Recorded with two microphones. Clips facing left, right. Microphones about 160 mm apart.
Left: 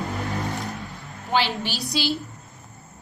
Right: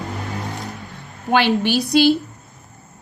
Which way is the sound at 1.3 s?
60° right (ahead or behind).